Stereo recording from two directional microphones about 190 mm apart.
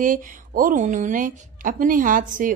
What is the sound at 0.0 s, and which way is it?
A woman's voice, 45° right (ahead or behind).